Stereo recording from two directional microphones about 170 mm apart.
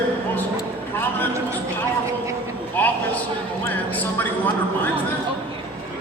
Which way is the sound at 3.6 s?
10° left (ahead or behind).